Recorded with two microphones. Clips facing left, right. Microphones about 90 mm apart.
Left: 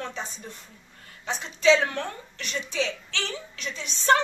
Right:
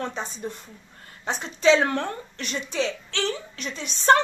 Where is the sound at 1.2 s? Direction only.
40° right (ahead or behind).